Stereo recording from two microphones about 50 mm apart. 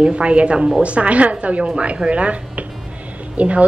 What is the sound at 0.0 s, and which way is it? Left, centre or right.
A woman's voice, right.